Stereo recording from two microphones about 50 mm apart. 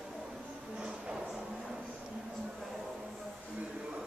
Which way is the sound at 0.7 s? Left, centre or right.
Centre.